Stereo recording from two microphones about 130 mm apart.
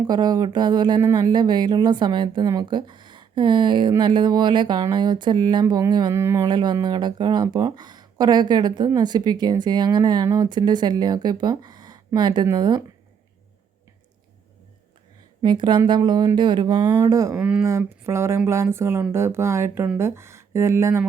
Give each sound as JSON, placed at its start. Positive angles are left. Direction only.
{"t": 0.1, "sound": "a woman's voice", "side_deg": -30}
{"t": 6.5, "sound": "a woman's voice", "side_deg": -35}
{"t": 15.4, "sound": "a woman's voice", "side_deg": -35}
{"t": 17.3, "sound": "speech", "side_deg": -10}
{"t": 17.6, "sound": "speech", "side_deg": -20}